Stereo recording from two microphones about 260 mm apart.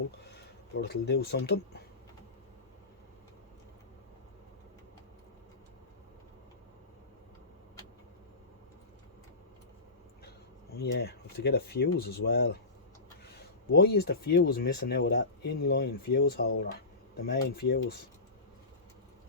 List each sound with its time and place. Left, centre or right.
0.7 s speech: left
10.8 s speech: left